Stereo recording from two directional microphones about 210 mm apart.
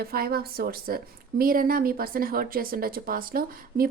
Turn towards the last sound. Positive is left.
turn(degrees=-45)  # may be behind; listen again after turning